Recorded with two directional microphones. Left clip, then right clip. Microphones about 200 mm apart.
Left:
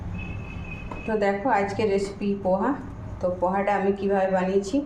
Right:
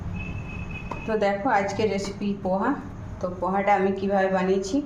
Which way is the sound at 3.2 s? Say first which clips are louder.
Left 2 dB; 5° left (ahead or behind).